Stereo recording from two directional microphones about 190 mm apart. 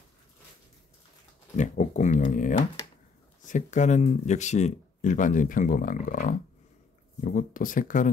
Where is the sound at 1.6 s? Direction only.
40° left (ahead or behind).